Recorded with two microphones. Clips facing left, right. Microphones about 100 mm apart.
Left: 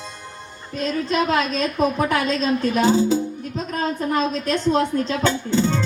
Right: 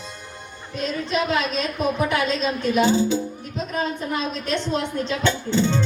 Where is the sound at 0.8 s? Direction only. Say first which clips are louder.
Left 3 dB; 40° left (ahead or behind).